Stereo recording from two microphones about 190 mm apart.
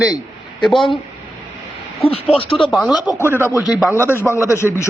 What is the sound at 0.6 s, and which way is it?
Speech, centre (ahead or behind).